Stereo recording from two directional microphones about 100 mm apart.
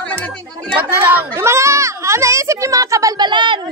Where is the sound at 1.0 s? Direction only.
20° right (ahead or behind); by 3.3 s 35° right (ahead or behind).